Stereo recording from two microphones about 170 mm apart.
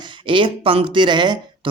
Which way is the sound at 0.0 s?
30° right (ahead or behind).